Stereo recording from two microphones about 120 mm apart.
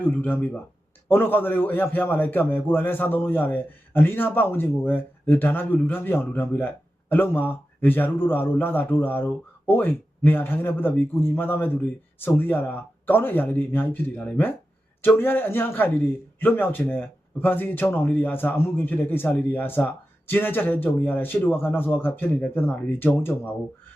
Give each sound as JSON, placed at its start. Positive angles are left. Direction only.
{"t": 0.0, "sound": "a man's voice", "side_deg": 15}